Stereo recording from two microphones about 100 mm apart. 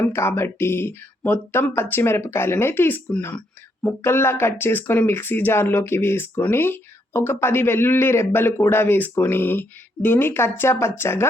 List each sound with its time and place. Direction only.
0.0 s speech: 25° left (ahead or behind)